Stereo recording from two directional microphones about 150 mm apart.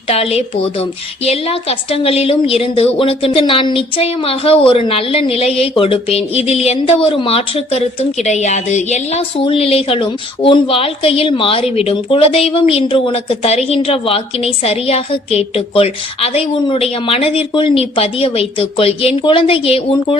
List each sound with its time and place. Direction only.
0.1 s a woman's voice: 40° left (ahead or behind)
9.4 s a woman's voice: 40° left (ahead or behind)